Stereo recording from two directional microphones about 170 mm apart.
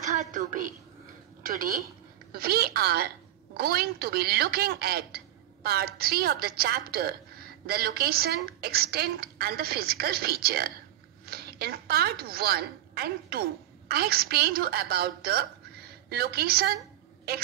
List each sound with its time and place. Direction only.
0.1 s a woman's voice: 45° right (ahead or behind); by 16.6 s 65° right (ahead or behind)